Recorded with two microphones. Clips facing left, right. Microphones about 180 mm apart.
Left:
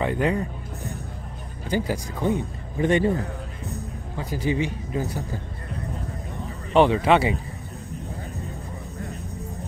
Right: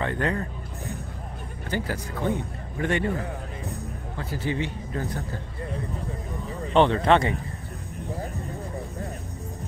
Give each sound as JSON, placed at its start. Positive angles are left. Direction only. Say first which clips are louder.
{"t": 0.0, "sound": "speech", "louder": "left 3 dB", "side_deg": 10}
{"t": 1.7, "sound": "speech", "louder": "left 4 dB", "side_deg": 15}
{"t": 4.2, "sound": "speech", "louder": "left 4 dB", "side_deg": 15}
{"t": 6.7, "sound": "speech", "louder": "left 2 dB", "side_deg": 10}